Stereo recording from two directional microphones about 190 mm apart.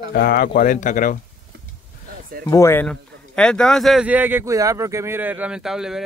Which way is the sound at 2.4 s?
15° left (ahead or behind).